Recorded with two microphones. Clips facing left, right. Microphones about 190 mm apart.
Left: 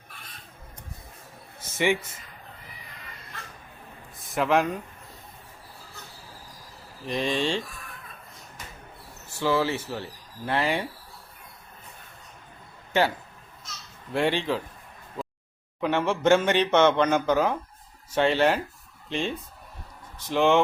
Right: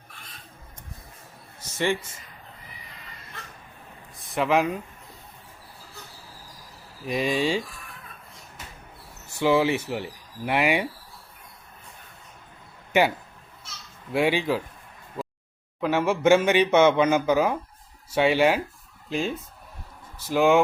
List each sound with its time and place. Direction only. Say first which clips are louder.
4.2 s speech: right 1 dB; centre (ahead or behind)
7.0 s speech: right 2 dB; 5° right (ahead or behind)
9.3 s speech: right 4 dB; 15° right (ahead or behind)
12.9 s speech: right 2 dB; 15° right (ahead or behind)
15.8 s speech: right 2 dB; 5° right (ahead or behind)